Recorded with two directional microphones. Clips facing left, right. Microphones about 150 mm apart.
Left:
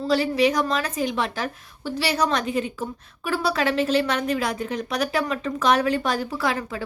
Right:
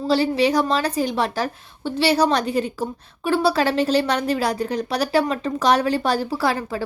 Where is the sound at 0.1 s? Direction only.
30° right (ahead or behind).